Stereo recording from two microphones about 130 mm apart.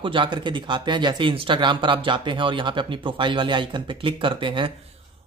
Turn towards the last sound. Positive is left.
turn(degrees=-40)  # may be behind; listen again after turning